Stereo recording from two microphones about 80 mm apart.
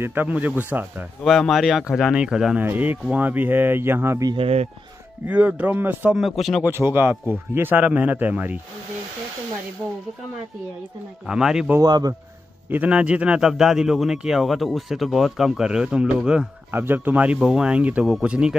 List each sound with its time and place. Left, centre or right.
0.0 s a man's voice: right
1.2 s speech: centre
2.6 s a man's voice: right
5.2 s a man's voice: centre
6.1 s speech: centre
6.6 s a man's voice: right
11.2 s speech: centre
11.8 s speech: right
12.6 s speech: centre
13.5 s speech: centre
16.7 s speech: right